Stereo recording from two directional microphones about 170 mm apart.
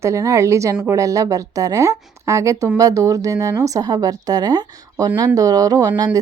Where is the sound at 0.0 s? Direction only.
20° right (ahead or behind).